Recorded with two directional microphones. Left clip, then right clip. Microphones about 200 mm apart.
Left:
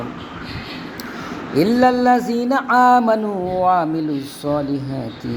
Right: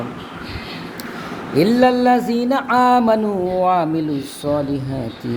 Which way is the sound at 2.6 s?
5° right (ahead or behind).